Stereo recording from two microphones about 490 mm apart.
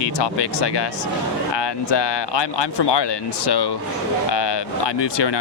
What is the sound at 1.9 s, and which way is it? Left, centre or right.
Speech, left.